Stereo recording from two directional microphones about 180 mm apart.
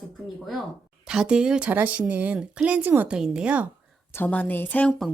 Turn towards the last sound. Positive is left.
turn(degrees=10)  # may be behind; listen again after turning